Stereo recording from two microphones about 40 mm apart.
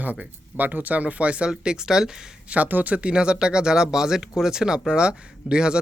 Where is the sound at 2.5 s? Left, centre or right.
Right.